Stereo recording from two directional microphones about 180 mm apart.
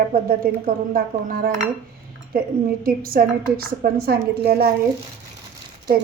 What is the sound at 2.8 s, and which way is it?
Speech, 55° right (ahead or behind).